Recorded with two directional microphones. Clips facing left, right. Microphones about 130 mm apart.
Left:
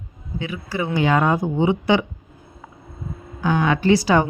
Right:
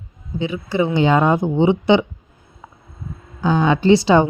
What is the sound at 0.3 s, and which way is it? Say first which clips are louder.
Speech: right 6 dB; 25° right (ahead or behind).